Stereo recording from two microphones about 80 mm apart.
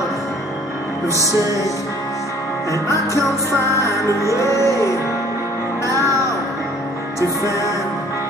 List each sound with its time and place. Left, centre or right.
2.7 s music: left
7.2 s music: left